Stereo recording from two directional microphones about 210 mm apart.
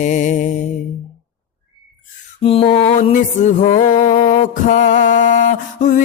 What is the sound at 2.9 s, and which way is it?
Music, 35° left (ahead or behind).